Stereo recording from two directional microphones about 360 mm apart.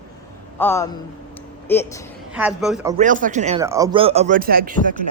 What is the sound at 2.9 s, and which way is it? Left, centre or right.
Speech, right.